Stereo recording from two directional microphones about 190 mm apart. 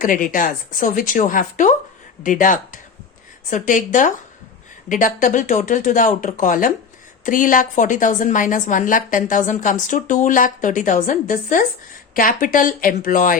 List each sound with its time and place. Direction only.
0.0 s a woman's voice: 45° left (ahead or behind)